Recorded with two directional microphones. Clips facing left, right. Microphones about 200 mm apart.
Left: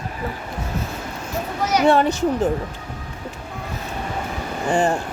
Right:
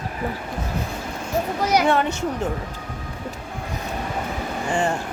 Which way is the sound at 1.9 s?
35° left (ahead or behind).